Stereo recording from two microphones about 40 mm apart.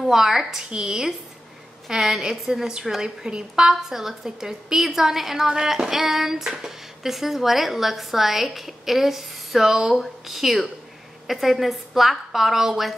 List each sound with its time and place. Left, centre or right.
0.1 s a woman's voice: centre